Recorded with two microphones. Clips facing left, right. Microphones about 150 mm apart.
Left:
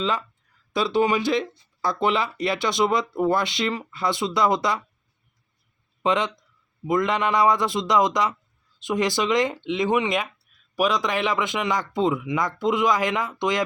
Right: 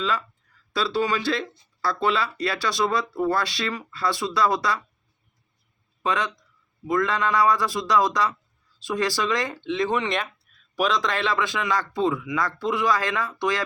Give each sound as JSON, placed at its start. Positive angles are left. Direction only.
{"t": 0.0, "sound": "speech", "side_deg": 20}
{"t": 6.0, "sound": "speech", "side_deg": 20}